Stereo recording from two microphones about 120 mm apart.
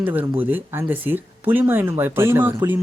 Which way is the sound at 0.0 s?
15° right (ahead or behind).